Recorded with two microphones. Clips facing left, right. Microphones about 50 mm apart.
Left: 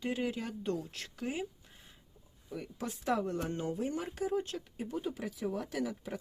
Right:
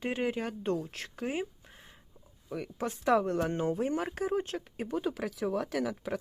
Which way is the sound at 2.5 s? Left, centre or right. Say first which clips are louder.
Right 5 dB; right.